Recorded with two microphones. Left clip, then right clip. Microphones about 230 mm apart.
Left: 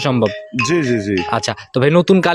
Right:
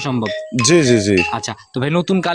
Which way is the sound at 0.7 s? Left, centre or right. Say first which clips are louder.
Right 6 dB; right.